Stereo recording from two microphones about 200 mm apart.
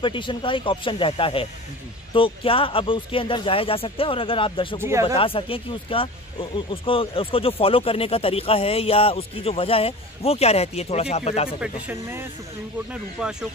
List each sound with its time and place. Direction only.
0.0 s speech: 25° left (ahead or behind)
11.6 s speech: 10° right (ahead or behind)